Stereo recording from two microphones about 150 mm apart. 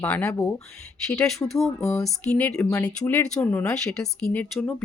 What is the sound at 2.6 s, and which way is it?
Speech, 25° left (ahead or behind).